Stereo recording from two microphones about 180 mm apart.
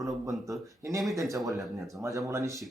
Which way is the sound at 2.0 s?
15° right (ahead or behind).